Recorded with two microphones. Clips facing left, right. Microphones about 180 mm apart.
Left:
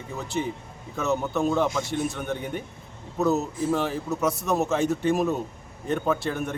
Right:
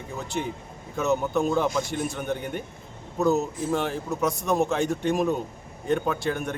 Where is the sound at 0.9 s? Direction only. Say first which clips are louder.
Right 2 dB; centre (ahead or behind).